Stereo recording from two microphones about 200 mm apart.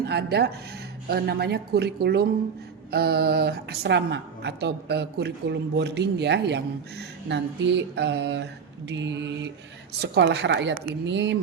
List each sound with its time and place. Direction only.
0.0 s a woman's voice: 55° right (ahead or behind)